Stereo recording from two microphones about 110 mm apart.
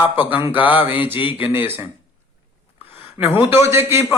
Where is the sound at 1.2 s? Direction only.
50° left (ahead or behind).